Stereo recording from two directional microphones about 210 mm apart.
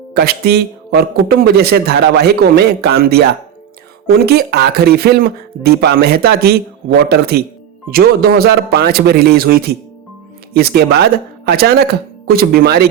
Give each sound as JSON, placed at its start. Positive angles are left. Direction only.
{"t": 0.1, "sound": "a man's voice", "side_deg": -50}